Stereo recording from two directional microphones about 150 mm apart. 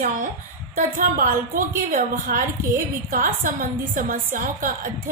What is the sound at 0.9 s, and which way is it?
A woman's voice, 70° right (ahead or behind).